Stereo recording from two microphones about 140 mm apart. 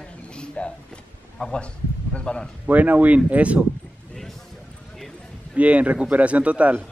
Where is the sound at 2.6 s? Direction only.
10° right (ahead or behind).